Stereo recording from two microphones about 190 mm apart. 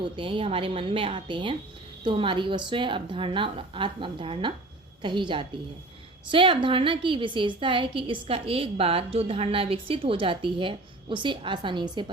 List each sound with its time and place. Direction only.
0.0 s a woman's voice: 25° right (ahead or behind)